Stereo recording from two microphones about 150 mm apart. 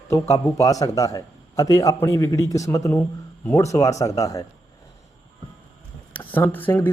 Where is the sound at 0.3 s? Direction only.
20° left (ahead or behind).